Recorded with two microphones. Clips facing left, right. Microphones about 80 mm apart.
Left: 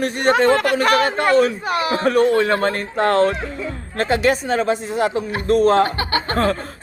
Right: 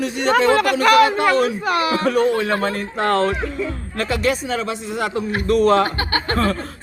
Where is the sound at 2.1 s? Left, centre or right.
Left.